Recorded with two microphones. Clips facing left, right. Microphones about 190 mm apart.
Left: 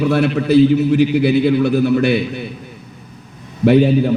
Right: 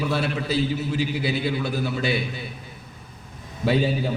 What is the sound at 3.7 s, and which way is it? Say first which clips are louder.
Speech: left 11 dB; 60° left (ahead or behind).